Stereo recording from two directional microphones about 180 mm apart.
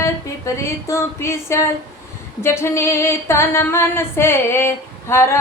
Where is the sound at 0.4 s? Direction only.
15° left (ahead or behind).